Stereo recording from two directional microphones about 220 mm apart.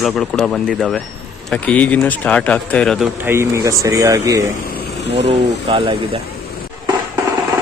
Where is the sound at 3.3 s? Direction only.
10° right (ahead or behind).